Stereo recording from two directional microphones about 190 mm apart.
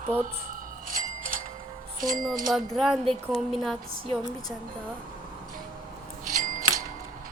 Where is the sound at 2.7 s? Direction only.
Centre (ahead or behind).